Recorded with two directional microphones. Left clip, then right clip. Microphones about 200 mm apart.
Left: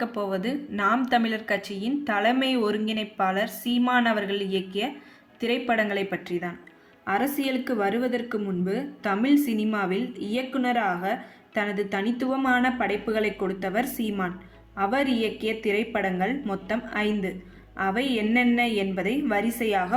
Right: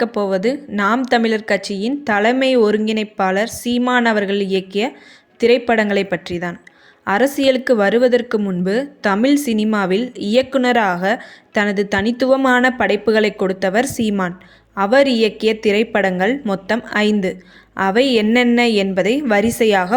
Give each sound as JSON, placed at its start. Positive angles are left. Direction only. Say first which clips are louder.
{"t": 0.0, "sound": "a woman's voice", "louder": "right 11 dB", "side_deg": -35}